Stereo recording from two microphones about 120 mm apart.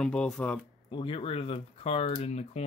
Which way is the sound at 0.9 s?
45° left (ahead or behind).